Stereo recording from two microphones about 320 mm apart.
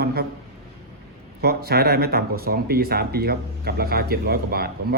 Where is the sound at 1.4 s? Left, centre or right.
Right.